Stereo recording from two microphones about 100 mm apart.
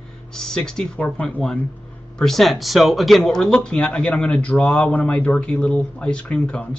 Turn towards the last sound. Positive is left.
turn(degrees=10)  # may be behind; listen again after turning